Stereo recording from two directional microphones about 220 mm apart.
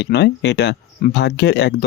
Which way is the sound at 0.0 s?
50° left (ahead or behind).